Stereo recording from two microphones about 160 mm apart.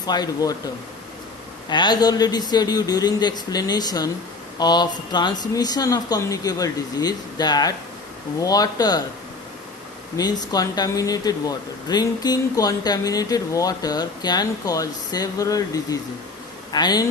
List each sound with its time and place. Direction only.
0.0 s speech: 25° left (ahead or behind)
1.7 s speech: 25° left (ahead or behind)
10.2 s speech: 25° left (ahead or behind)